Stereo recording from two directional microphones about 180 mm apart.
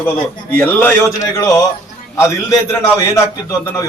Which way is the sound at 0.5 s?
10° left (ahead or behind).